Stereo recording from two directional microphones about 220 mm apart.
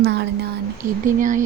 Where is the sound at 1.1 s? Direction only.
35° right (ahead or behind).